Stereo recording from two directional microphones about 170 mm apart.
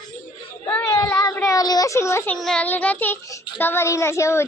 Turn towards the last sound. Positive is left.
turn(degrees=15)  # may be behind; listen again after turning